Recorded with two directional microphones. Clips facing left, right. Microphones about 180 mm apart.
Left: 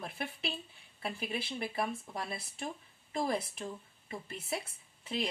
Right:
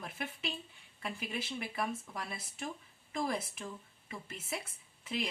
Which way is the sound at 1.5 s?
30° left (ahead or behind).